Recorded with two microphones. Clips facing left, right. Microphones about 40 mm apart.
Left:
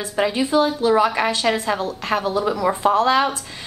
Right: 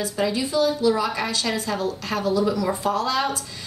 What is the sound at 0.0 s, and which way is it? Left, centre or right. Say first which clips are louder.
A woman's voice: left 3 dB; left.